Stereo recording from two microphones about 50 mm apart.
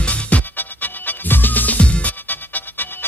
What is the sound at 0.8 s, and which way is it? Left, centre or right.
Music, left.